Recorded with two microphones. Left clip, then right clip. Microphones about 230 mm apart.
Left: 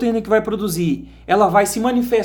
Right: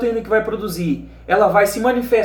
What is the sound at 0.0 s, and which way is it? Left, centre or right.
Speech, left.